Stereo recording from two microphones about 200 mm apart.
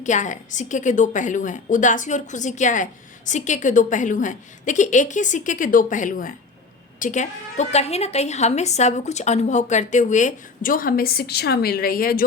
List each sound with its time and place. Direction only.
0.0 s a woman's voice: 40° left (ahead or behind)